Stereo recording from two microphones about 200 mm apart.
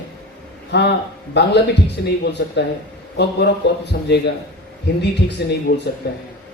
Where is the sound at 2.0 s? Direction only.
55° left (ahead or behind).